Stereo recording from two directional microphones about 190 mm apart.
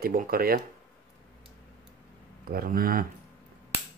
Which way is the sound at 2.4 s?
50° right (ahead or behind).